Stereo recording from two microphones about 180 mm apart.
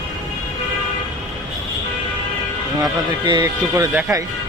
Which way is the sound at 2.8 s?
25° right (ahead or behind).